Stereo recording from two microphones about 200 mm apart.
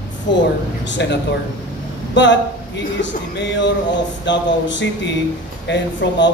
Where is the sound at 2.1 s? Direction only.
60° left (ahead or behind).